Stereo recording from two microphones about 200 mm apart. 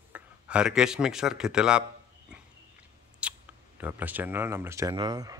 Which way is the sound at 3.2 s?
5° right (ahead or behind).